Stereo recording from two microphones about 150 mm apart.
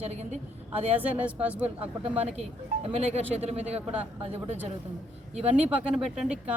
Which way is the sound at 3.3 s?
45° right (ahead or behind).